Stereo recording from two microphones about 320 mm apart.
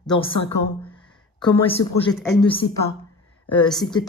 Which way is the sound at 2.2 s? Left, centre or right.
Centre.